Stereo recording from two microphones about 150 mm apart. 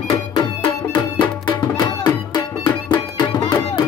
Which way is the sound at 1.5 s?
25° left (ahead or behind).